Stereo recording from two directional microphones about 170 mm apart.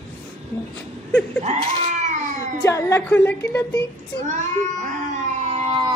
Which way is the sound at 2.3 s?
15° left (ahead or behind).